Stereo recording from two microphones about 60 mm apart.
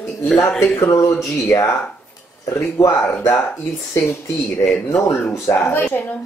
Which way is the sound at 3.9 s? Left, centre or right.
Left.